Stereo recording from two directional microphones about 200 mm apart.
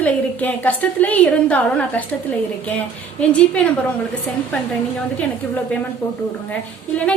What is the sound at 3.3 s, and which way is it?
Speech, 5° left (ahead or behind).